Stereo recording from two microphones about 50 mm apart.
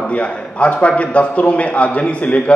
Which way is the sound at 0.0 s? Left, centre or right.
Left.